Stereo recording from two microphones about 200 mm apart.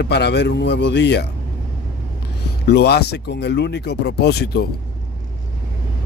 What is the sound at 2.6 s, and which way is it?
Speech, 55° left (ahead or behind).